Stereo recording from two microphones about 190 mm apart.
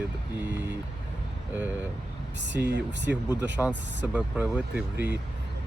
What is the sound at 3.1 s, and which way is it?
Speech, 10° right (ahead or behind).